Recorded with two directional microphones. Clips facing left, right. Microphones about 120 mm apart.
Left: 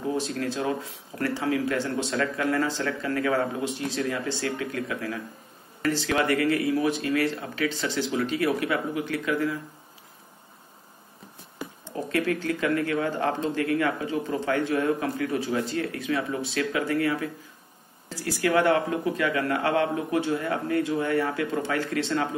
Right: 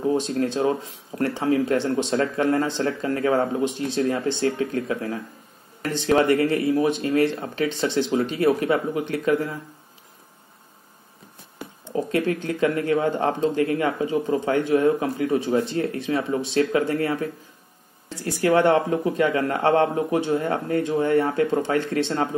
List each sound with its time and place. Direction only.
0.4 s speech: 30° right (ahead or behind)
12.1 s speech: 20° right (ahead or behind)
18.2 s speech: 30° right (ahead or behind)